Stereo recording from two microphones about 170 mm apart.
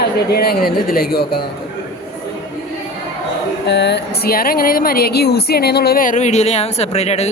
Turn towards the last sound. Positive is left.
turn(degrees=40)  # may be behind; listen again after turning